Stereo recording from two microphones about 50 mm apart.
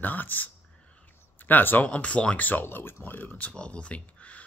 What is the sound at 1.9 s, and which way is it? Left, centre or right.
Speech, left.